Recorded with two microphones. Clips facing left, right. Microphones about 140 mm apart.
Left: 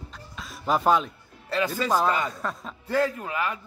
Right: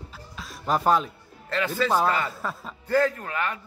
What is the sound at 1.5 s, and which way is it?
Speech, 15° left (ahead or behind).